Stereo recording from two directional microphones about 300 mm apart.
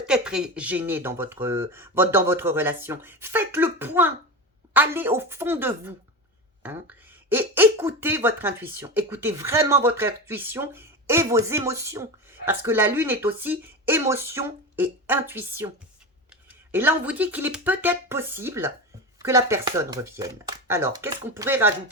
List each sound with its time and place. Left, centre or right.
0.0 s speech: centre
16.7 s speech: centre